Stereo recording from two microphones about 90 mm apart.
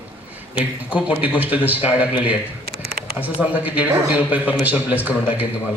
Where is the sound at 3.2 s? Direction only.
15° right (ahead or behind).